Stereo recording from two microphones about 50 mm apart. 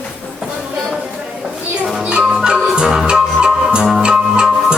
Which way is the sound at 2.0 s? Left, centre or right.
Right.